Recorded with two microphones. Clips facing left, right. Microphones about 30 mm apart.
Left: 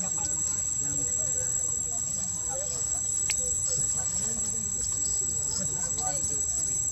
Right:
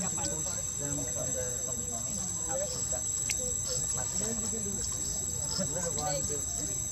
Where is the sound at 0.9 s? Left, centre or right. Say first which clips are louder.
Right 1 dB; centre.